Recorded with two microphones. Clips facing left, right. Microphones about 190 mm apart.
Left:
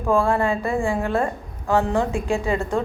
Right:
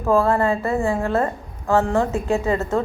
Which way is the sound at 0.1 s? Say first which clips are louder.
Right 2 dB; 15° left (ahead or behind).